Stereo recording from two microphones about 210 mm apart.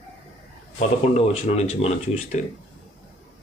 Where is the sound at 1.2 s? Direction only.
30° left (ahead or behind).